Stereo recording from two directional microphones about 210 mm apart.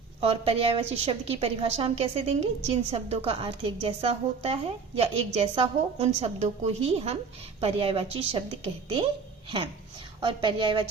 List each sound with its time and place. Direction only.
0.2 s a woman's voice: 25° right (ahead or behind)
10.2 s a woman's voice: 20° right (ahead or behind)